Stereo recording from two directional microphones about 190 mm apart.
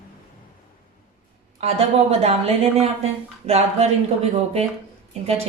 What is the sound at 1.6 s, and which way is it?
Speech, 30° right (ahead or behind).